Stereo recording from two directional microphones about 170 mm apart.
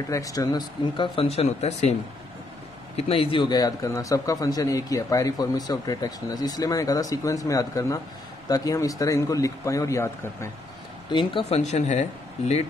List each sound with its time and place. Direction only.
0.1 s speech: 20° left (ahead or behind); by 2.0 s 40° left (ahead or behind)
3.0 s a man's voice: 35° left (ahead or behind); by 10.5 s 15° left (ahead or behind)
11.1 s speech: 30° left (ahead or behind)